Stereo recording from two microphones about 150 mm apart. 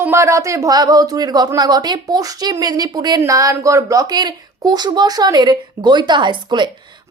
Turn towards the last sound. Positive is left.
turn(degrees=-30)  # may be behind; listen again after turning